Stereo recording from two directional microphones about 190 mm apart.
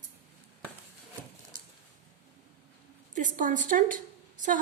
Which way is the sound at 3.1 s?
40° right (ahead or behind).